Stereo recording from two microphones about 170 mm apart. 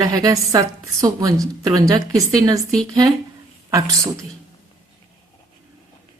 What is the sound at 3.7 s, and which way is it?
Speech, 20° right (ahead or behind).